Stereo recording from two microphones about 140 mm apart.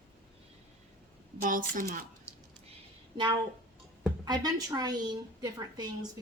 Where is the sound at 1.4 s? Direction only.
75° right (ahead or behind).